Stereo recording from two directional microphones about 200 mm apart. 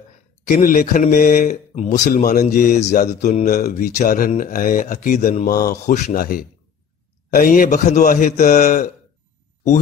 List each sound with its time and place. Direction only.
0.5 s a man's voice: 45° left (ahead or behind)
5.5 s a man's voice: 50° left (ahead or behind)